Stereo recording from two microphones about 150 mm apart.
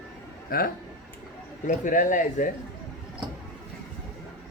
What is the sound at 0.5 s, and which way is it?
Speech, 80° left.